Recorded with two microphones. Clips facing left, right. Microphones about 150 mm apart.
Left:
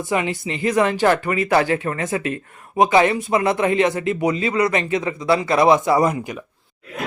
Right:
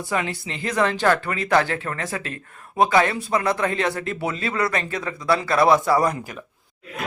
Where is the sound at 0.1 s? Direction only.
5° left (ahead or behind).